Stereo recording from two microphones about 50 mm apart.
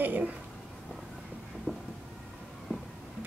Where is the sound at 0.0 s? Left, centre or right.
Right.